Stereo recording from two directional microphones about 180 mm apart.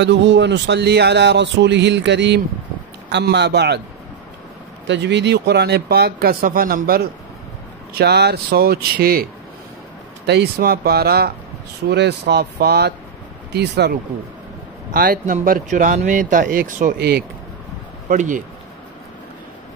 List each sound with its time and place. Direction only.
0.0 s speech: 80° right
4.8 s speech: 80° right; by 7.0 s 55° right (ahead or behind)
7.9 s speech: 65° right (ahead or behind)
14.9 s speech: 50° right (ahead or behind)
18.0 s speech: 45° right (ahead or behind)